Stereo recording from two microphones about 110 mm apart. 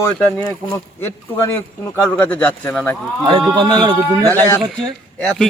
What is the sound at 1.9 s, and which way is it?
A man's voice, 15° left (ahead or behind).